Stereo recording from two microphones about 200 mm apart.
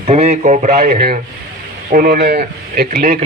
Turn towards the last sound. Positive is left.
turn(degrees=-45)  # may be behind; listen again after turning